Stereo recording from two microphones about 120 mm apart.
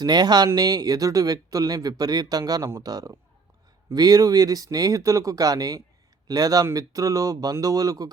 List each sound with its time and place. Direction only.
0.0 s speech: 35° right (ahead or behind)